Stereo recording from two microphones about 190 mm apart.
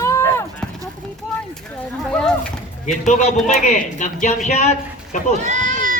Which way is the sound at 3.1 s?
35° left (ahead or behind).